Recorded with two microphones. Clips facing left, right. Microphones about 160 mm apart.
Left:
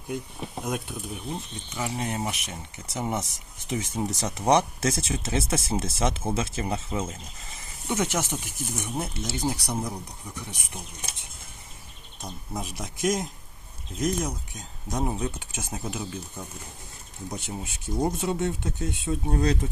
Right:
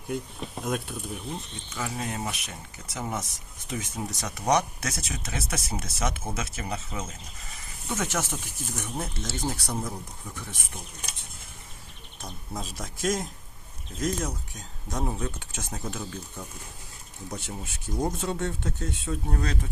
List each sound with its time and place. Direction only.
0.1 s speech: 10° left (ahead or behind)
1.7 s speech: 20° left (ahead or behind)
7.6 s speech: 20° left (ahead or behind)
12.2 s speech: 15° left (ahead or behind)